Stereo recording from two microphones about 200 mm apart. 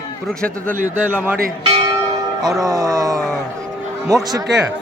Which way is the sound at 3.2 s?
Centre (ahead or behind).